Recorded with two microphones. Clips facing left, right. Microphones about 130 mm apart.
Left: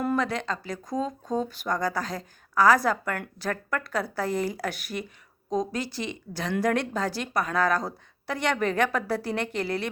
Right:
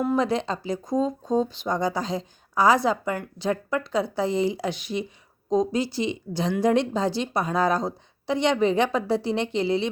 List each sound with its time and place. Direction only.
0.2 s a woman's voice: 30° right (ahead or behind)
4.9 s speech: 10° right (ahead or behind)
5.5 s a woman's voice: 25° right (ahead or behind)